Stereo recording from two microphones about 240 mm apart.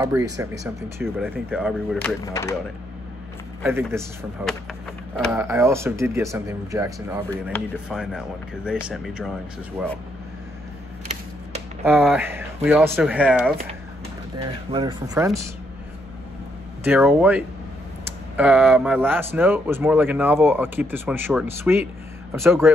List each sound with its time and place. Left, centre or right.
0.0 s speech: centre
3.6 s speech: centre
12.0 s speech: centre
14.7 s speech: centre
16.8 s speech: centre